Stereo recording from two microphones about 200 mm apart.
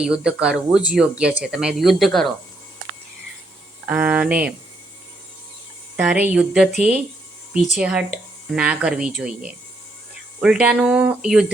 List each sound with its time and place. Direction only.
0.0 s speech: 5° right (ahead or behind)
3.8 s speech: 5° right (ahead or behind)
6.0 s speech: 5° right (ahead or behind)